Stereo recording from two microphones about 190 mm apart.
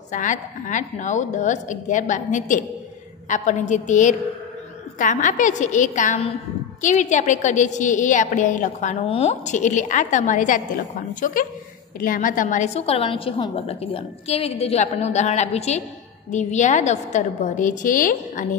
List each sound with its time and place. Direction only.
0.1 s a woman's voice: 40° left (ahead or behind)